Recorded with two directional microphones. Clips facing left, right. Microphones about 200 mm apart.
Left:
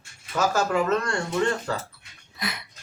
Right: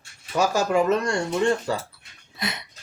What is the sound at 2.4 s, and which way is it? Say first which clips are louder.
Speech: right 2 dB; 25° right (ahead or behind).